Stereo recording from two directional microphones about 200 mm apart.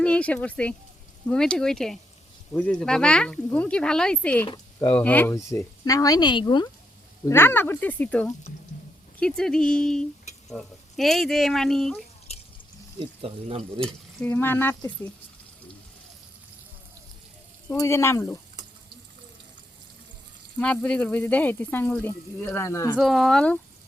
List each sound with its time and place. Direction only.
0.0 s speech: 5° left (ahead or behind)
4.4 s speech: 20° left (ahead or behind)
7.3 s speech: 10° left (ahead or behind)
13.0 s speech: 30° right (ahead or behind)
13.8 s speech: 5° left (ahead or behind)
17.7 s speech: 15° left (ahead or behind)
20.6 s speech: 5° left (ahead or behind)
23.0 s speech: centre (ahead or behind)